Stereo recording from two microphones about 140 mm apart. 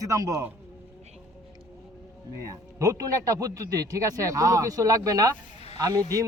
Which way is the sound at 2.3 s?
25° right (ahead or behind).